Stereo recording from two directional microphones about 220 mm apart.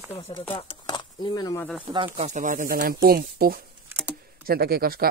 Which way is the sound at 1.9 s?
25° right (ahead or behind).